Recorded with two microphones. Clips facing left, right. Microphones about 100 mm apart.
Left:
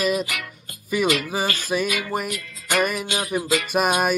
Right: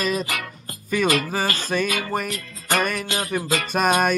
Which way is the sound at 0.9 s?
10° left (ahead or behind).